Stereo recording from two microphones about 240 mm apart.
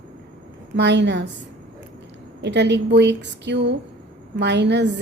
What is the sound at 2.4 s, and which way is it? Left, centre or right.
A woman's voice, right.